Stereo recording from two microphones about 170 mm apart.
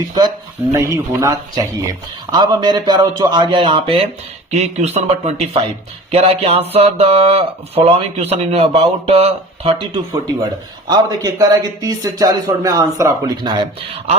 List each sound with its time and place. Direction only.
0.1 s speech: 25° right (ahead or behind)
9.7 s speech: 25° right (ahead or behind)